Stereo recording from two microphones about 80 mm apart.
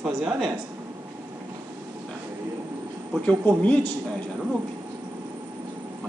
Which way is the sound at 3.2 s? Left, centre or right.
Centre.